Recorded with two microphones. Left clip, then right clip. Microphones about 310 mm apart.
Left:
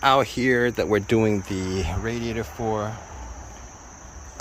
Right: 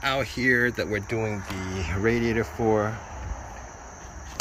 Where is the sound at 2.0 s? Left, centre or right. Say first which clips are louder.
Right 4 dB; centre.